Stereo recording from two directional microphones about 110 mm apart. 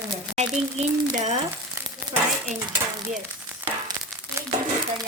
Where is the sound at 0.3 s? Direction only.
90° right.